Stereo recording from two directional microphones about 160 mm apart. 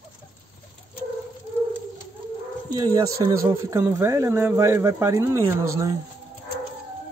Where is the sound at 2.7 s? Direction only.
20° right (ahead or behind).